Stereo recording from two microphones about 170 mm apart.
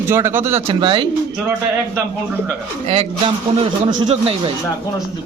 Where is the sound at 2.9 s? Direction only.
35° right (ahead or behind).